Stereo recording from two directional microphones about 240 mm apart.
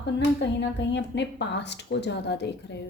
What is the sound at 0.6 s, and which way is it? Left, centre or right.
A woman's voice, left.